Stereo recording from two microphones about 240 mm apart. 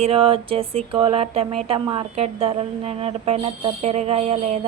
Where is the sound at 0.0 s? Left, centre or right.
Right.